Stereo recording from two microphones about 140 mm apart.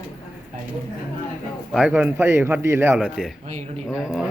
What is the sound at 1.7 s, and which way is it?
Speech, 10° right (ahead or behind).